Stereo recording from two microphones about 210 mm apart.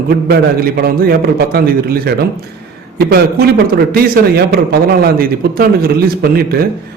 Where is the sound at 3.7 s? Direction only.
50° right (ahead or behind).